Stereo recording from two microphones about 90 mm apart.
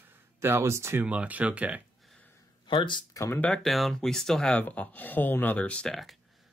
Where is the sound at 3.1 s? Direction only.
35° left (ahead or behind).